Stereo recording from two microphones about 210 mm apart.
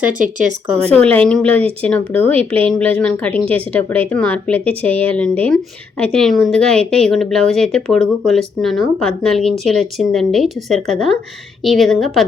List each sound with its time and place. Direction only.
0.1 s speech: 40° right (ahead or behind)
0.9 s speech: 10° left (ahead or behind)